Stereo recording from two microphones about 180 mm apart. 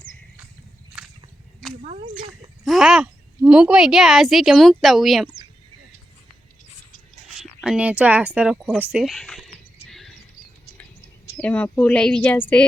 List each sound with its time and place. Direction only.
1.0 s a sound: 5° right (ahead or behind)
1.8 s speech: 35° right (ahead or behind)
2.6 s a woman's voice: centre (ahead or behind)
7.6 s a woman's voice: 5° right (ahead or behind)
11.3 s a woman's voice: 5° left (ahead or behind)